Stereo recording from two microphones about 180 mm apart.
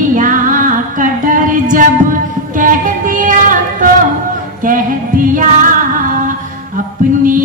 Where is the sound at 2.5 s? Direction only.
45° right (ahead or behind).